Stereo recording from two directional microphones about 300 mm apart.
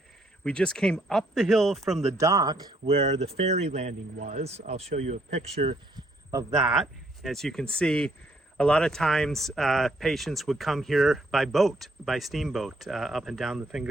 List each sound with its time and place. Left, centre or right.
0.4 s speech: centre
2.1 s speech: centre
6.7 s speech: centre